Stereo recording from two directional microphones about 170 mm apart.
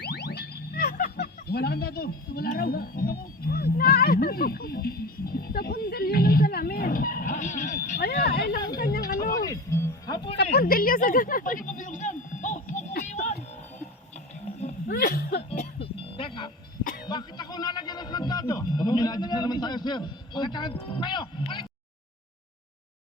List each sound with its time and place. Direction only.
0.0 s speech: 70° left (ahead or behind)
9.4 s speech: 15° left (ahead or behind)
10.3 s speech: 65° left (ahead or behind); by 13.3 s 45° left (ahead or behind)
14.4 s a sound: 40° left (ahead or behind)
14.8 s speech: 60° left (ahead or behind)
15.4 s music: 35° left (ahead or behind)
17.1 s a man's voice: 25° left (ahead or behind)